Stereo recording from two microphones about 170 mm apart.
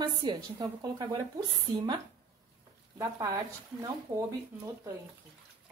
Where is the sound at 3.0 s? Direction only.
20° right (ahead or behind).